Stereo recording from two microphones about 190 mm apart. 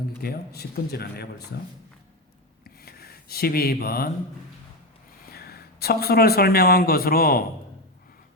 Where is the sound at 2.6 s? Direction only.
55° left (ahead or behind).